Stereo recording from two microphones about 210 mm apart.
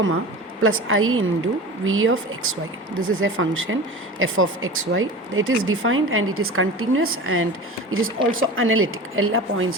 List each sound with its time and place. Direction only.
0.6 s speech: 75° right (ahead or behind)